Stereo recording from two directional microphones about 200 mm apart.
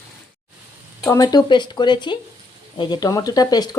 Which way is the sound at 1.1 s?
20° left (ahead or behind).